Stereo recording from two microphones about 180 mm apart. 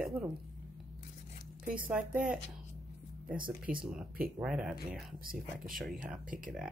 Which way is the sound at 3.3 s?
50° right (ahead or behind).